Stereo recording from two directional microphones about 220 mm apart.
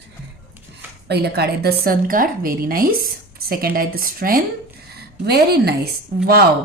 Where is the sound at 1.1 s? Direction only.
45° right (ahead or behind).